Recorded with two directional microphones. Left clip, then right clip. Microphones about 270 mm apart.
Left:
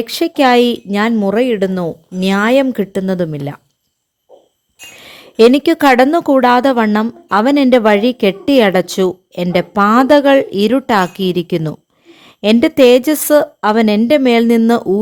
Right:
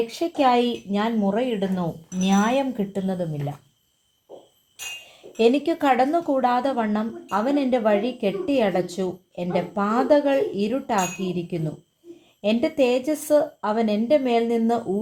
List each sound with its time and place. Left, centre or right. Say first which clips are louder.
0.1 s speech: left 12 dB; left
5.0 s speech: left 11 dB; left